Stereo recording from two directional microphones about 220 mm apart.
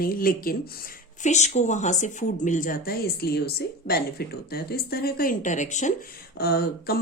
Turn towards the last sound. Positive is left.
turn(degrees=45)  # may be behind; listen again after turning